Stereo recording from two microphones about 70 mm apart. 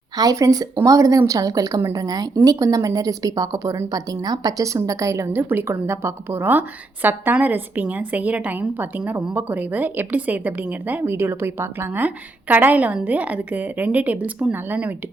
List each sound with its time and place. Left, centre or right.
0.2 s a woman's voice: right
3.9 s a woman's voice: right
5.5 s a woman's voice: right